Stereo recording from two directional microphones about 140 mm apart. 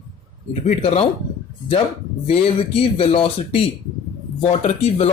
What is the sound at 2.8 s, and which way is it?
Speech, 40° left (ahead or behind).